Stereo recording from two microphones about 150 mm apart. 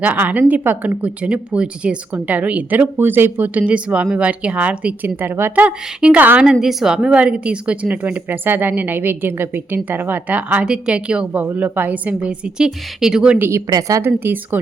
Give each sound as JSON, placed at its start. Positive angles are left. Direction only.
{"t": 0.0, "sound": "speech", "side_deg": -10}
{"t": 13.5, "sound": "a woman's voice", "side_deg": -25}